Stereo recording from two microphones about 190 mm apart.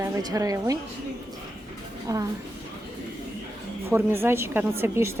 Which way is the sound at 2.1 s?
15° right (ahead or behind).